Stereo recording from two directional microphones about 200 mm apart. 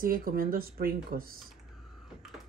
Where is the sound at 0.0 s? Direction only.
45° right (ahead or behind).